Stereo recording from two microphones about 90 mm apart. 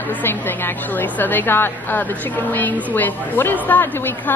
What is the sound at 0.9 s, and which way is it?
Speech, 20° left (ahead or behind).